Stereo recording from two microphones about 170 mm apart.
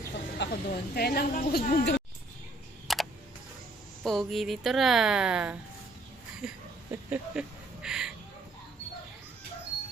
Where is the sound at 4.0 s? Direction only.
Centre (ahead or behind).